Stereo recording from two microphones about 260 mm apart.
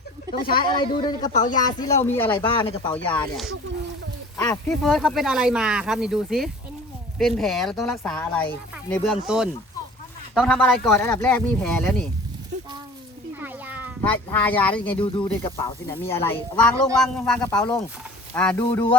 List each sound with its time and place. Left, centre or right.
0.5 s speech: centre
1.5 s speech: centre
2.4 s speech: centre
2.9 s speech: centre
13.4 s cat: centre
14.0 s speech: centre
14.9 s speech: centre